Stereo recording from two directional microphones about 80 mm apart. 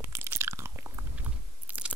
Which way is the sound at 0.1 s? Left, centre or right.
Right.